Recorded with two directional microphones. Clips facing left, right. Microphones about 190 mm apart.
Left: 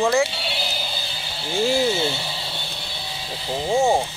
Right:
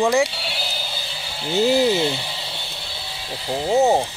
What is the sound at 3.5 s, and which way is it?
Speech, 15° right (ahead or behind).